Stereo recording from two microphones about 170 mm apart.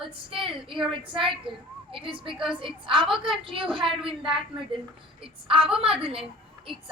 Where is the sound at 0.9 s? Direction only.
30° right (ahead or behind).